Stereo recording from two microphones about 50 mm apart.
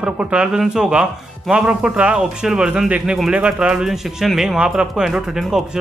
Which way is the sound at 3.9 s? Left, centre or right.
Centre.